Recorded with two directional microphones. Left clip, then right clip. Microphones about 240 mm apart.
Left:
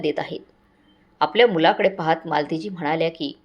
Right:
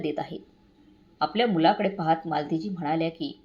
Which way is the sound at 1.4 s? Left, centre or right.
Centre.